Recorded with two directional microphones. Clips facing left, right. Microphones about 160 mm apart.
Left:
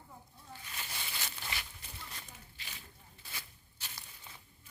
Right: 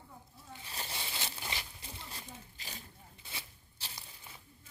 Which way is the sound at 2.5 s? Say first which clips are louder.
Right 4 dB; 40° right (ahead or behind).